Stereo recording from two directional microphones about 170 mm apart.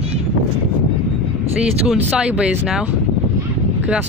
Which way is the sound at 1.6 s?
5° right (ahead or behind).